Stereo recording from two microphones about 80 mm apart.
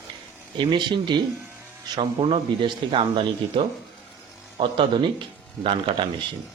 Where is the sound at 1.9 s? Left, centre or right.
Right.